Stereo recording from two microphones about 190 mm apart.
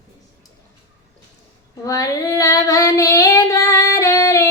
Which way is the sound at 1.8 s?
20° left (ahead or behind).